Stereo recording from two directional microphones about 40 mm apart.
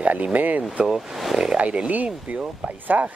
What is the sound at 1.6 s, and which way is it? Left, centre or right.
Speech, right.